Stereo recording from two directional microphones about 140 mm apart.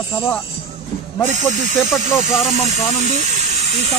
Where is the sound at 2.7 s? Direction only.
55° right (ahead or behind).